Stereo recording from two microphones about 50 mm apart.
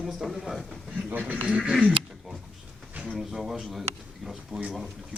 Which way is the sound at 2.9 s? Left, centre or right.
Right.